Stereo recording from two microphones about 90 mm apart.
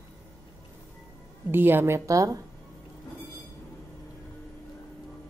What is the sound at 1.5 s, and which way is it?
Speech, 25° right (ahead or behind).